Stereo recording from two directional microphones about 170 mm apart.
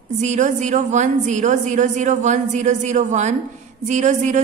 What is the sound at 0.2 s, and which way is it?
A woman's voice, 45° right (ahead or behind).